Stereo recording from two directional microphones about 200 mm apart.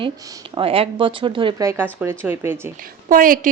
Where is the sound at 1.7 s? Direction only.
10° right (ahead or behind).